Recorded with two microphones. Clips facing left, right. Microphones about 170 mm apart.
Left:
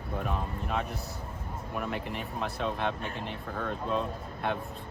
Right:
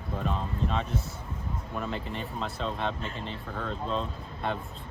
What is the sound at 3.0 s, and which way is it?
Speech, 60° left (ahead or behind).